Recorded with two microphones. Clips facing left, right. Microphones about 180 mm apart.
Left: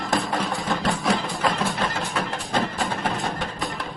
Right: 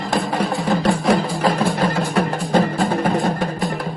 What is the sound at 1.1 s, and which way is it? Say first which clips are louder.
Music: right 5 dB; 40° right (ahead or behind).